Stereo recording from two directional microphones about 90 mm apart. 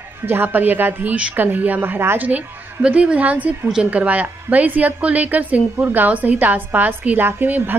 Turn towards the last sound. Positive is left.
turn(degrees=-20)  # may be behind; listen again after turning